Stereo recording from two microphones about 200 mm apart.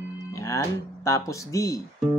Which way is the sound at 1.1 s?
15° left (ahead or behind).